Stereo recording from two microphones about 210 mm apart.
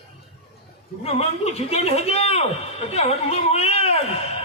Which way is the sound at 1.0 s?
30° left (ahead or behind).